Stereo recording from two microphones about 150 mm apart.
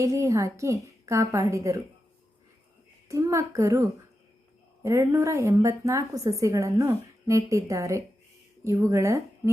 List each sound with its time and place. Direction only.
0.0 s a woman's voice: 20° right (ahead or behind)
3.1 s a woman's voice: 20° right (ahead or behind)